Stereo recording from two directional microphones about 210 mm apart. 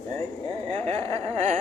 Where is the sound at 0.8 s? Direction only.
30° right (ahead or behind).